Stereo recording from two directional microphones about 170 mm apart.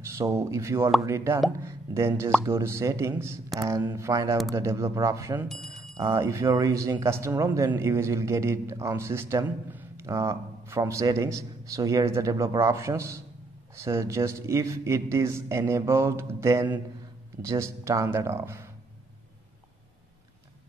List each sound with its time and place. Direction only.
0.0 s a man's voice: 15° right (ahead or behind)
5.5 s bicycle bell: centre (ahead or behind)
5.9 s a man's voice: 20° right (ahead or behind)